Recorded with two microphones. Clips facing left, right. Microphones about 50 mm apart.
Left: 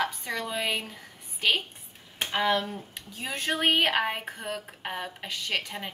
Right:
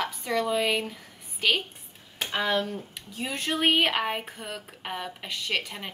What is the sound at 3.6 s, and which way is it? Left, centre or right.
A woman's voice, centre.